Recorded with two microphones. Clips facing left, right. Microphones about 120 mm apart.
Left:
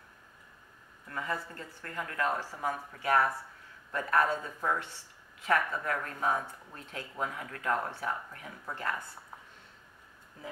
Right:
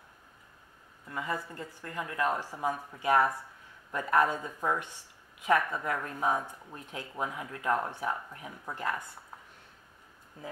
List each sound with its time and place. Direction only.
1.0 s speech: 15° right (ahead or behind)